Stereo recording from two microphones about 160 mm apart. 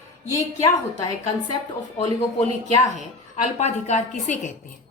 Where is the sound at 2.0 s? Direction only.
45° left (ahead or behind).